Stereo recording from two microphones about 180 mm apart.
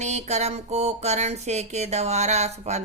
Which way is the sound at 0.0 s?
40° right (ahead or behind).